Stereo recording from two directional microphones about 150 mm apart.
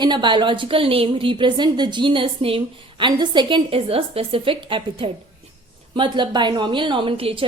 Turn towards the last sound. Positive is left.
turn(degrees=-35)  # may be behind; listen again after turning